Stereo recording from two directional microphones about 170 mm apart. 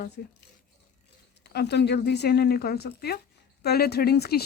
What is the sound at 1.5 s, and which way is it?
Speech, 75° left (ahead or behind).